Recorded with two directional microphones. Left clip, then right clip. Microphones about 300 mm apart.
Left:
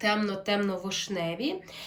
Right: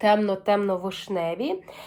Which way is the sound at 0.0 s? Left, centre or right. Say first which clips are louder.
Right 7 dB; centre.